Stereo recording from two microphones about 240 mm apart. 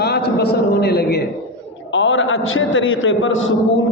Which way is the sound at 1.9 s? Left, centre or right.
Left.